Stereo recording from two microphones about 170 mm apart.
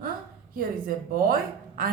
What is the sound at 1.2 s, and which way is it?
Speech, 60° right (ahead or behind).